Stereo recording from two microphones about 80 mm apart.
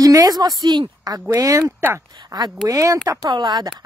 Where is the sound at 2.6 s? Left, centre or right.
Right.